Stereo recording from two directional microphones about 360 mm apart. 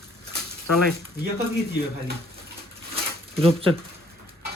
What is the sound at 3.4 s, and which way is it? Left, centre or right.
Speech, centre.